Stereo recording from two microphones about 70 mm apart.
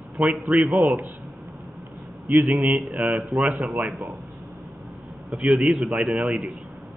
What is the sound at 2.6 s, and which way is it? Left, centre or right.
Speech, centre.